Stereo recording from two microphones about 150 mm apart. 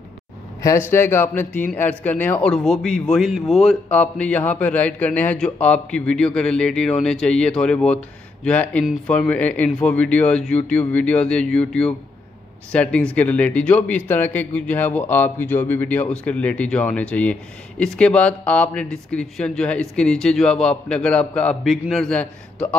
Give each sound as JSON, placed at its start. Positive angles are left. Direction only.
{"t": 0.6, "sound": "a man's voice", "side_deg": 20}